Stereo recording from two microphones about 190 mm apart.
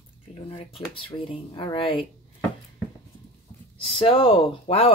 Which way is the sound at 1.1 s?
30° left (ahead or behind).